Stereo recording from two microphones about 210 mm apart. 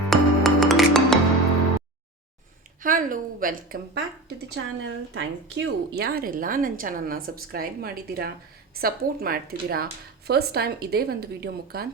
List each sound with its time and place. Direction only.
0.1 s music: centre (ahead or behind)
2.8 s a woman's voice: 40° right (ahead or behind)
4.5 s a woman's voice: 60° right (ahead or behind)